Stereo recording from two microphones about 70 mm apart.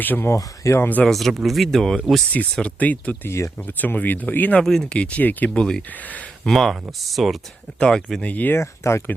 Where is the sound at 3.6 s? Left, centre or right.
Left.